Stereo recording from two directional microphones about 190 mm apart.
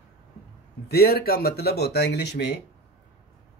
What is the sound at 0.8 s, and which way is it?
Speech, 55° left (ahead or behind).